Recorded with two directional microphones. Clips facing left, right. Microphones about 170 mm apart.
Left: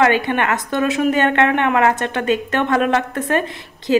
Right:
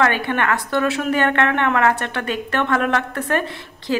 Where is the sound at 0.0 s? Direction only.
20° left (ahead or behind).